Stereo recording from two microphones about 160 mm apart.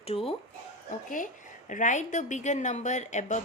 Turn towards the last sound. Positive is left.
turn(degrees=45)  # may be behind; listen again after turning